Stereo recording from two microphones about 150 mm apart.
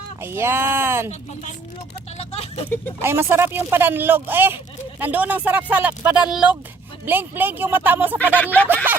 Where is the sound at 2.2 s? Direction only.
45° left (ahead or behind).